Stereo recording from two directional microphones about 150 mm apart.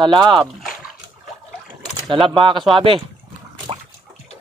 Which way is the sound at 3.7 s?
40° right (ahead or behind).